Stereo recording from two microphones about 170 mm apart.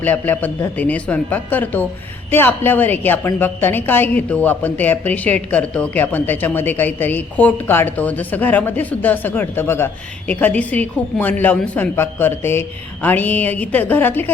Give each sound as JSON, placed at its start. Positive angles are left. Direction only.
{"t": 0.0, "sound": "a woman's voice", "side_deg": 10}